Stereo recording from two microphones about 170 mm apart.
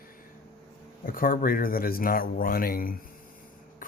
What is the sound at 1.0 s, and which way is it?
Speech, 55° left (ahead or behind).